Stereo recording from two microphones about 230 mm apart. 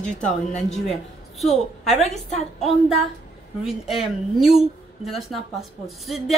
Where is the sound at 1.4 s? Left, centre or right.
Centre.